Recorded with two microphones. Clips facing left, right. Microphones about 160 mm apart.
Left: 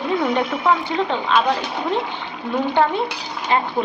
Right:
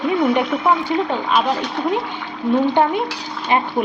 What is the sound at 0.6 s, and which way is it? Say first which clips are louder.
Speech: right 1 dB; 10° right (ahead or behind).